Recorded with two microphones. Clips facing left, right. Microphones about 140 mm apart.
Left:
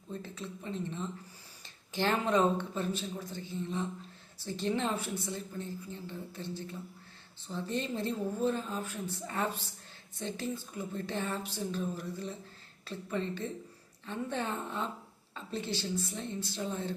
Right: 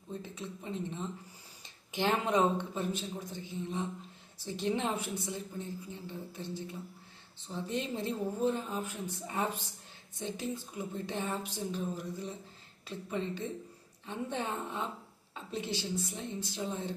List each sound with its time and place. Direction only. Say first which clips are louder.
0.1 s a woman's voice: even; 15° right (ahead or behind)